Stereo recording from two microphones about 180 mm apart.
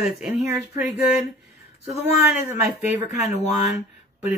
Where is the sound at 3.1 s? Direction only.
40° left (ahead or behind).